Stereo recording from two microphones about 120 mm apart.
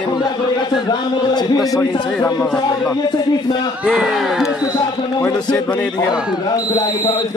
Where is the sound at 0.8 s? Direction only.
35° left (ahead or behind).